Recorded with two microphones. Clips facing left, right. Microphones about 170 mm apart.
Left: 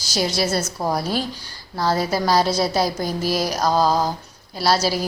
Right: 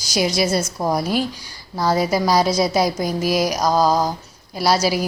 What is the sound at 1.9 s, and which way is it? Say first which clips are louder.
A woman's voice: right 2 dB; 15° right (ahead or behind).